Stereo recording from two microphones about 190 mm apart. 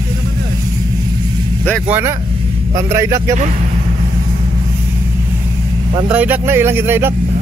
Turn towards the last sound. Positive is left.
turn(degrees=-10)  # may be behind; listen again after turning